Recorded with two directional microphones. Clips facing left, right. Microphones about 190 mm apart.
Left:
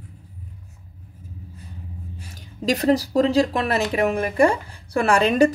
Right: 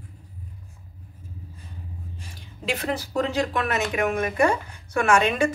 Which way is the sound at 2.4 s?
40° left (ahead or behind).